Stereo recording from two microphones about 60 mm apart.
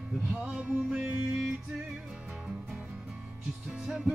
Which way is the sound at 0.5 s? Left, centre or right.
Centre.